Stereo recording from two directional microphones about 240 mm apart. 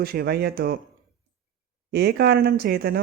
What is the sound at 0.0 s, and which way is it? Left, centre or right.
Speech, right.